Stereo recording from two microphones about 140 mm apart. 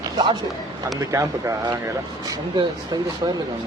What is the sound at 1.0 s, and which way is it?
Speech, 20° right (ahead or behind).